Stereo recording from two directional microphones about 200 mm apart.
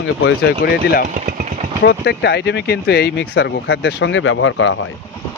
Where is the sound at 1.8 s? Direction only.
60° left (ahead or behind); by 4.9 s 75° left (ahead or behind).